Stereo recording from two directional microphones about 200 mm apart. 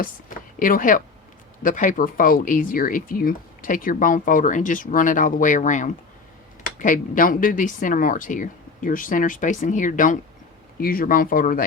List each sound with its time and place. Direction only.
0.0 s speech: 45° left (ahead or behind)